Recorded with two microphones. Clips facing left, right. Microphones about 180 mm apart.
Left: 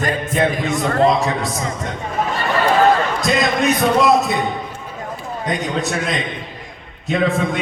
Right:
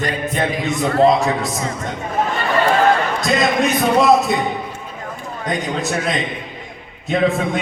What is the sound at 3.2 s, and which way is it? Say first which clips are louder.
A man's voice: right 1 dB; centre (ahead or behind).